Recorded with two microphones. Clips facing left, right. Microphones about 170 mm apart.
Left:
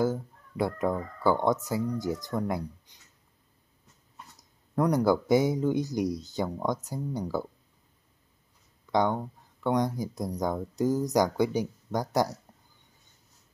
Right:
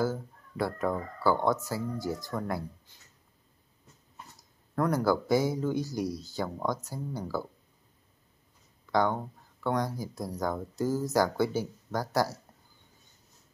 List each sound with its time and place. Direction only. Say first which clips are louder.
0.0 s speech: left 3 dB; 20° left (ahead or behind)
4.4 s speech: left 3 dB; 20° left (ahead or behind)
8.9 s speech: left 1 dB; 20° left (ahead or behind)